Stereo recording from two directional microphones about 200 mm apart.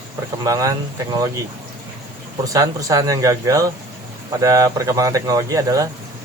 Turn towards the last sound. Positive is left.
turn(degrees=-15)  # may be behind; listen again after turning